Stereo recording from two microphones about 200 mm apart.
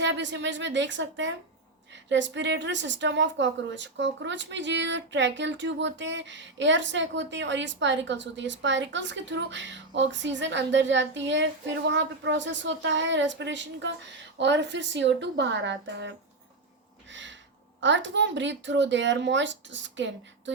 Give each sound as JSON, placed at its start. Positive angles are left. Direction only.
{"t": 0.0, "sound": "a woman's voice", "side_deg": -65}
{"t": 17.1, "sound": "a sound", "side_deg": -65}
{"t": 17.7, "sound": "a woman's voice", "side_deg": -65}